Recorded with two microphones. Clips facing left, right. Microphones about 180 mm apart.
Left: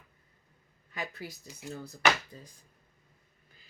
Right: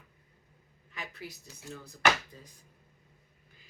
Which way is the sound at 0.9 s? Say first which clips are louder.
Left 4 dB; 40° left (ahead or behind).